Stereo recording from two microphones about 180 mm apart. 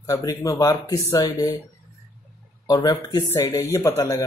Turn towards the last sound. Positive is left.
turn(degrees=15)  # may be behind; listen again after turning